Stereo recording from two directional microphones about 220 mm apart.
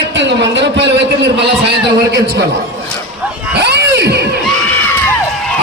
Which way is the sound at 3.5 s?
50° right (ahead or behind).